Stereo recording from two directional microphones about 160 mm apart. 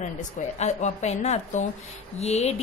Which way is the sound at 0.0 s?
50° left (ahead or behind).